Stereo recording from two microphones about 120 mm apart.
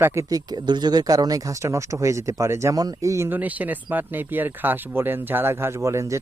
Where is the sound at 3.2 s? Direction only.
15° right (ahead or behind).